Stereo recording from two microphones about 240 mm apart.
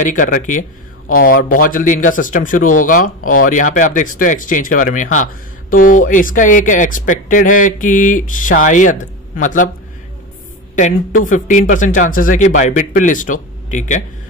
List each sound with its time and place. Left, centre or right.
0.0 s speech: left
10.8 s speech: left